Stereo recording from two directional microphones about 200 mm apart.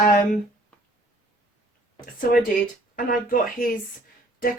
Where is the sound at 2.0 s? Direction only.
45° left (ahead or behind).